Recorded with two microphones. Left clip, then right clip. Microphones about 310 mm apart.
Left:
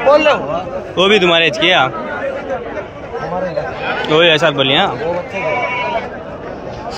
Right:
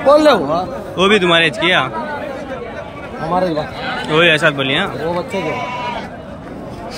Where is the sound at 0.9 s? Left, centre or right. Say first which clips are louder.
Left 1 dB; centre.